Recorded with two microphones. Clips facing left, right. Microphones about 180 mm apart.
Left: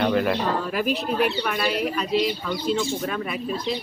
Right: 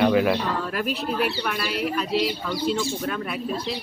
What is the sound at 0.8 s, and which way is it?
Speech, centre (ahead or behind).